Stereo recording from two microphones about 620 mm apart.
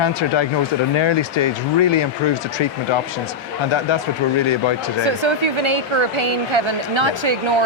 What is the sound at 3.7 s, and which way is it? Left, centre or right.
Speech, left.